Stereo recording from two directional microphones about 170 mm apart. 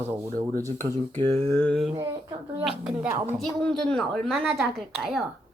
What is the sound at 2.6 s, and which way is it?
A child's voice, centre (ahead or behind).